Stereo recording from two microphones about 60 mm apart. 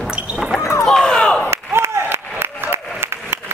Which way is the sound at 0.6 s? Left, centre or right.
Left.